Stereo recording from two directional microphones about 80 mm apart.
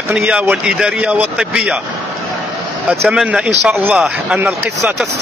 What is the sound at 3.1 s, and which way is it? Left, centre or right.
A man's voice, centre.